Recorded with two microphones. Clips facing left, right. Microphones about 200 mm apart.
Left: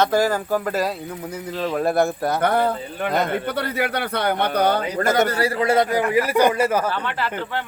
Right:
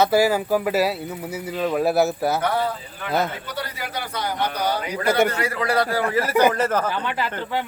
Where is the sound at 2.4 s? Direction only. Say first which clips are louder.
Left 3 dB; 55° left (ahead or behind).